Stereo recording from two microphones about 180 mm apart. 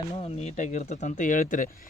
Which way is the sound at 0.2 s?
35° left (ahead or behind).